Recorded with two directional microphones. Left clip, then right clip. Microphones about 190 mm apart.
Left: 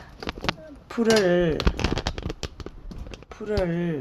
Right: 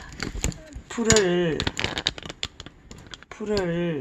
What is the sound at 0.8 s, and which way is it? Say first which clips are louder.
Speech: left 1 dB; 15° left (ahead or behind).